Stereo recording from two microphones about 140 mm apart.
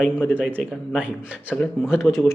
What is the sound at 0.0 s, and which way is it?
Speech, 10° left (ahead or behind).